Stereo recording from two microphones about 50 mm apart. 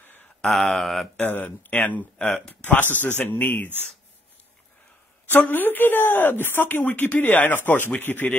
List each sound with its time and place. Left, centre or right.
0.4 s speech: centre
1.2 s speech: left
5.5 s speech: left